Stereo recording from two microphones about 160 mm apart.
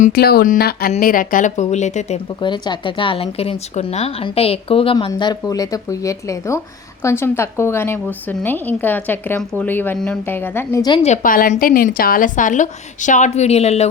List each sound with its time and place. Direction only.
0.0 s a woman's voice: 75° left (ahead or behind); by 2.1 s 45° left (ahead or behind)
2.4 s a woman's voice: 30° left (ahead or behind); by 10.8 s 15° left (ahead or behind)
11.0 s a woman's voice: 50° left (ahead or behind)